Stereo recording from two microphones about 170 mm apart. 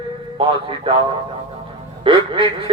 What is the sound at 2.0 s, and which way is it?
Speech, 30° right (ahead or behind).